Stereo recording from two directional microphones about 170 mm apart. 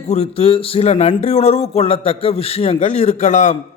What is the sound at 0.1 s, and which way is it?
A man's voice, 35° left (ahead or behind).